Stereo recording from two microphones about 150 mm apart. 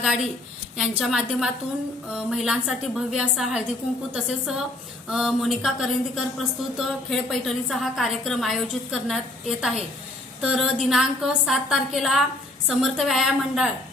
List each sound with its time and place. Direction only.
0.8 s a woman's voice: 5° right (ahead or behind)